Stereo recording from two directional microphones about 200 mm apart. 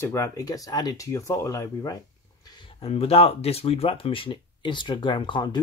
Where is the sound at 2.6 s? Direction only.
30° left (ahead or behind).